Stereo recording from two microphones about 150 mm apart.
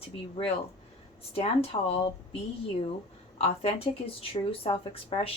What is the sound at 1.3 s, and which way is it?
Speech, 40° left (ahead or behind).